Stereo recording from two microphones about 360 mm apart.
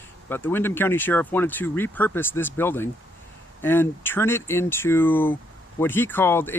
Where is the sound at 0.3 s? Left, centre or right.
Centre.